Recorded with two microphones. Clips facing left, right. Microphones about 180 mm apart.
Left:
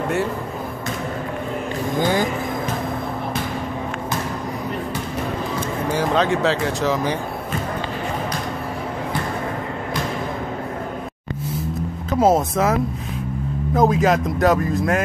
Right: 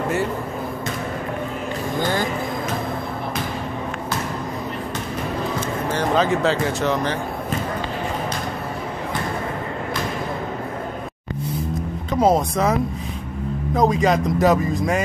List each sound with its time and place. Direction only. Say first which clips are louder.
2.0 s speech: left 3 dB; 15° left (ahead or behind)
6.1 s speech: right 1 dB; centre (ahead or behind)
12.1 s speech: left 1 dB; 5° left (ahead or behind)
13.7 s speech: left 1 dB; centre (ahead or behind)